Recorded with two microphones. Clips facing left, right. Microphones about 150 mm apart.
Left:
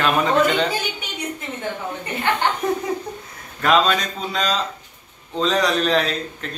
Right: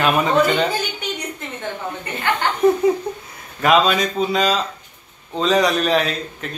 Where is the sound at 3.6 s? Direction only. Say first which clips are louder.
Right 2 dB; 10° right (ahead or behind).